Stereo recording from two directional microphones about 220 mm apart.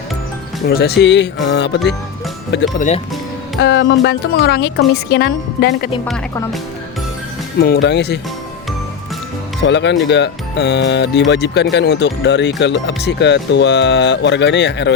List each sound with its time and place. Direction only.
0.7 s speech: 45° left (ahead or behind)
2.7 s speech: 35° left (ahead or behind)
3.6 s speech: 55° left (ahead or behind)
7.6 s speech: 50° left (ahead or behind)
9.6 s speech: 55° left (ahead or behind)